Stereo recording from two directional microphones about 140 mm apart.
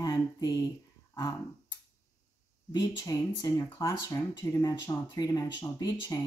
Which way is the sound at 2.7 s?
25° left (ahead or behind).